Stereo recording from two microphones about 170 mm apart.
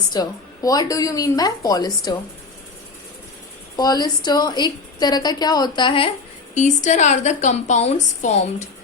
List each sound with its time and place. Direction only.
0.1 s a woman's voice: 20° left (ahead or behind)
3.8 s a woman's voice: 25° left (ahead or behind)
6.5 s a woman's voice: 45° left (ahead or behind)